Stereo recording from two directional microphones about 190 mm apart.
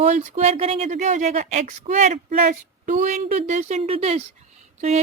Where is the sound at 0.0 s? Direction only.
40° right (ahead or behind).